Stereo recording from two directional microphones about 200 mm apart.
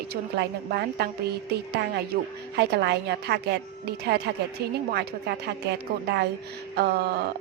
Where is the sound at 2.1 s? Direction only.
50° right (ahead or behind).